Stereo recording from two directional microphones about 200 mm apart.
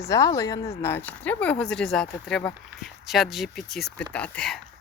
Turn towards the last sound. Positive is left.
turn(degrees=5)  # may be behind; listen again after turning